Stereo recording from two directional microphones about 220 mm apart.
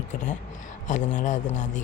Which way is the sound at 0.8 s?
35° left (ahead or behind).